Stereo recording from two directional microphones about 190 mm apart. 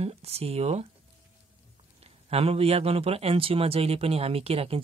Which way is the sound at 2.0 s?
30° right (ahead or behind).